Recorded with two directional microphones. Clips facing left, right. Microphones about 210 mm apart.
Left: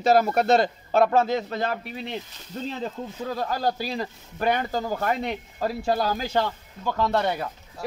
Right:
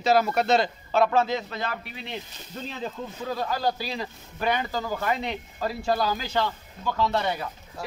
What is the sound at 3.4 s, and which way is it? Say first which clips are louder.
Speech: left 1 dB; 50° left (ahead or behind).